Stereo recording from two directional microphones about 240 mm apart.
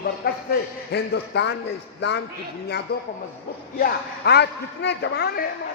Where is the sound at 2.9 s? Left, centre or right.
Left.